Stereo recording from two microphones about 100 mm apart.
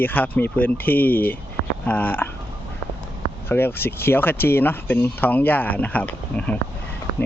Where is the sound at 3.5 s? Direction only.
20° left (ahead or behind).